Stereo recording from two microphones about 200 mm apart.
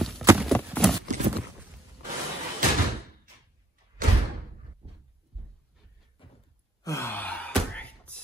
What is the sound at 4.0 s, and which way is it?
Door, 45° right (ahead or behind).